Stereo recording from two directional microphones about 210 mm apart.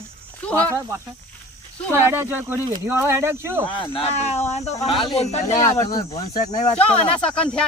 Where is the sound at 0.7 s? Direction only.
15° right (ahead or behind).